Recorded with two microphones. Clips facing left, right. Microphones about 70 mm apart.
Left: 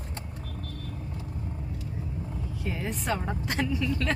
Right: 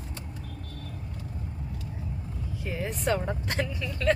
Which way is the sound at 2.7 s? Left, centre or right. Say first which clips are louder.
Right 2 dB; centre.